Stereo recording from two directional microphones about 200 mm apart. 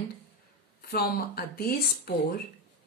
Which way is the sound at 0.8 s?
50° left (ahead or behind).